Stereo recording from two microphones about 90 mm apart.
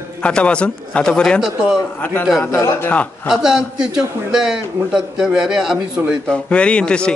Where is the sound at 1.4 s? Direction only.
5° right (ahead or behind).